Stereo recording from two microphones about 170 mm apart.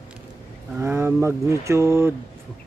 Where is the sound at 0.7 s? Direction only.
15° right (ahead or behind).